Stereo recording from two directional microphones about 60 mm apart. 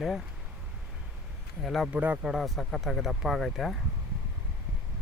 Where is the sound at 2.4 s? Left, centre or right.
Centre.